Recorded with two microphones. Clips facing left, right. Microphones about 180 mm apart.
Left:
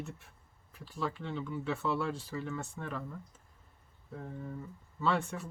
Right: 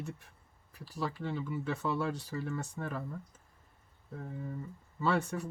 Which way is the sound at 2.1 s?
40° right (ahead or behind).